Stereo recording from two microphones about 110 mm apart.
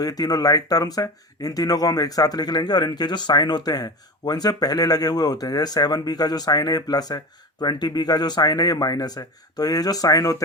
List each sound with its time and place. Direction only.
0.0 s speech: 35° left (ahead or behind)